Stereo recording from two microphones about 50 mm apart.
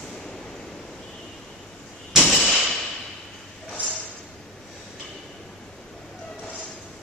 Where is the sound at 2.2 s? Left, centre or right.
Centre.